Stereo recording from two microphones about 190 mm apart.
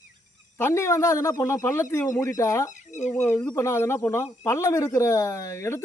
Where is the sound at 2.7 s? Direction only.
40° left (ahead or behind).